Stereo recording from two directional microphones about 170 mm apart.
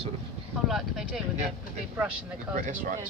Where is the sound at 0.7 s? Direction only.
Centre (ahead or behind).